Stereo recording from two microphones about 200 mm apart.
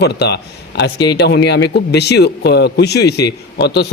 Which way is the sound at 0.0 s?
55° left (ahead or behind).